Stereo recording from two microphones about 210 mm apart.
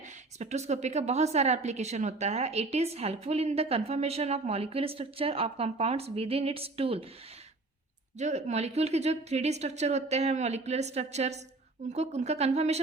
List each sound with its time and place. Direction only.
0.3 s a woman's voice: 35° right (ahead or behind)
8.2 s speech: 35° right (ahead or behind)